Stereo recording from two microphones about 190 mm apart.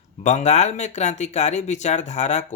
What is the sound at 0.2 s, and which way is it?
Speech, 35° left (ahead or behind).